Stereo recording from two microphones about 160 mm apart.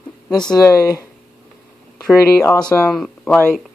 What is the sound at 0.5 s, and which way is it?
Speech, 20° left (ahead or behind).